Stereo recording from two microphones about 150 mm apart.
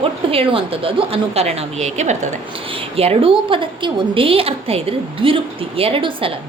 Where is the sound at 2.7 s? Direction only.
40° right (ahead or behind).